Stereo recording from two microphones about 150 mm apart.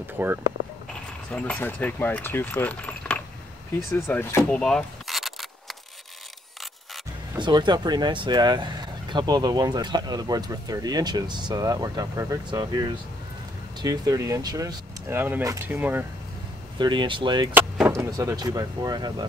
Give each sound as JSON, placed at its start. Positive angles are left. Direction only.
{"t": 0.2, "sound": "speech", "side_deg": -10}
{"t": 1.3, "sound": "speech", "side_deg": 10}
{"t": 4.5, "sound": "a sound", "side_deg": 5}
{"t": 7.3, "sound": "speech", "side_deg": -30}
{"t": 16.7, "sound": "speech", "side_deg": -30}
{"t": 17.8, "sound": "speech", "side_deg": -20}